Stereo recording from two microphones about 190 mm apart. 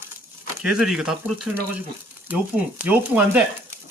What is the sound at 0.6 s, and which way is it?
Speech, 5° right (ahead or behind).